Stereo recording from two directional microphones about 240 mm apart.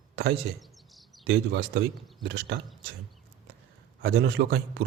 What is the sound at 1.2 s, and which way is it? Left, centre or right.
Speech, right.